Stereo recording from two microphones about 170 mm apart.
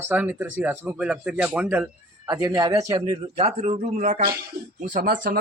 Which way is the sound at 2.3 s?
20° right (ahead or behind).